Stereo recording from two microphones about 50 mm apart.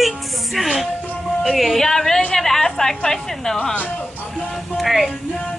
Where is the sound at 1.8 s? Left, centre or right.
Centre.